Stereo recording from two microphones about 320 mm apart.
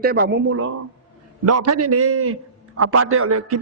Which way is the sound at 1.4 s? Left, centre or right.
Right.